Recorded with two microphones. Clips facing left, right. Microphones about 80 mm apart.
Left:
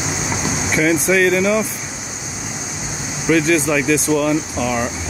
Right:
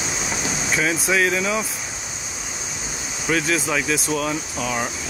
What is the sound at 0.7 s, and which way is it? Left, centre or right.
Speech, centre.